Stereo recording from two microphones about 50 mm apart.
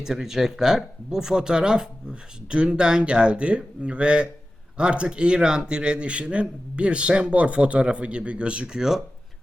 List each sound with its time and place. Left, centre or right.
0.0 s speech: centre